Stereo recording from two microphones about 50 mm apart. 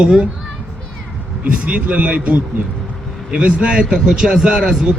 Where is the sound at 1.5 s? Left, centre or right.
Right.